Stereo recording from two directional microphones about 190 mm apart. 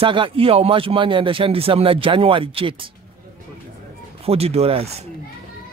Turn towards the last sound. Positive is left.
turn(degrees=-35)  # may be behind; listen again after turning